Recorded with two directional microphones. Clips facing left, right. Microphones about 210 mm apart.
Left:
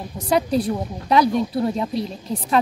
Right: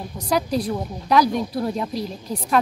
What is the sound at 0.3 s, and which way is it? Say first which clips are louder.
Speech: left 3 dB; 30° left (ahead or behind).